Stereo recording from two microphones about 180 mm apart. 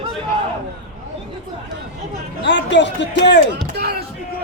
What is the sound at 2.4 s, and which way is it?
A man's voice, 75° left (ahead or behind).